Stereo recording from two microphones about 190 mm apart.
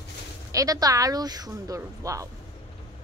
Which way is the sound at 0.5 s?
20° right (ahead or behind).